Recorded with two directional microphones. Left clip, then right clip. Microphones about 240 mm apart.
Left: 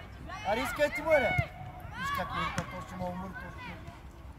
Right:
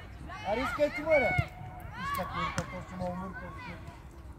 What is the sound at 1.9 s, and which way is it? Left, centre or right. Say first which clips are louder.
Speech: left 1 dB; left.